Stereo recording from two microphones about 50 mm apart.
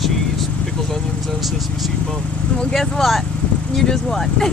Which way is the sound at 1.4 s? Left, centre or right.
Centre.